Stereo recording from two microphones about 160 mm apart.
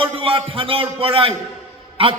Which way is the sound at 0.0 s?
35° right (ahead or behind).